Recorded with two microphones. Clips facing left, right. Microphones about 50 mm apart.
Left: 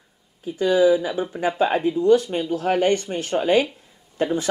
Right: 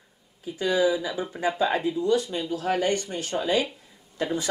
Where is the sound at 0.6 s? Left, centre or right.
Left.